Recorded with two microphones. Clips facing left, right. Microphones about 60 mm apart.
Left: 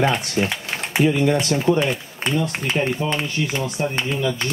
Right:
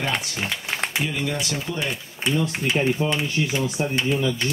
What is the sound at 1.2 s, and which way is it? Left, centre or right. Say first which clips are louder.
Speech: left 9 dB; left.